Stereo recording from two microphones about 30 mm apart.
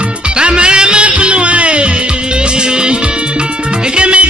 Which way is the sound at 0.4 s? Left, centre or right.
Right.